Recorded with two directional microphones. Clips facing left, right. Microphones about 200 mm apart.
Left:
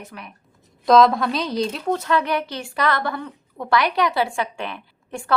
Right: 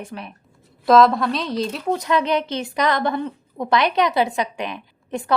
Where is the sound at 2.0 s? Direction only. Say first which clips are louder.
Right 2 dB; 20° right (ahead or behind).